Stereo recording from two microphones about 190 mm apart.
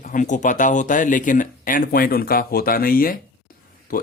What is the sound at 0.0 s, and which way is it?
Speech, 45° left (ahead or behind).